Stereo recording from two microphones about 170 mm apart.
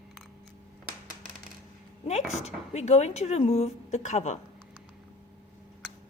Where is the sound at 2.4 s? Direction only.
40° left (ahead or behind).